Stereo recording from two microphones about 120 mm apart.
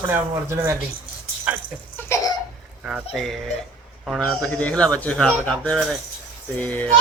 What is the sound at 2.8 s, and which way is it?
Speech, 10° right (ahead or behind).